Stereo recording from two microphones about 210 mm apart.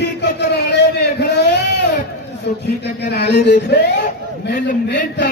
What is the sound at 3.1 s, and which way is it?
Speech, 50° left (ahead or behind).